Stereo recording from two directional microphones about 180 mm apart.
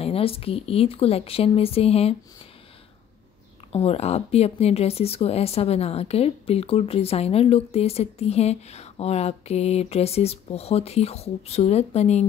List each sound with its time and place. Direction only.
0.0 s speech: 30° left (ahead or behind)
3.7 s speech: 35° left (ahead or behind)